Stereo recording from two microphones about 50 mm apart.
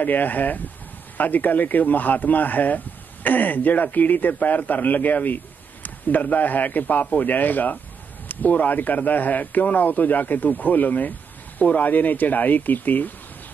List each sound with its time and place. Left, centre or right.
0.0 s a man's voice: left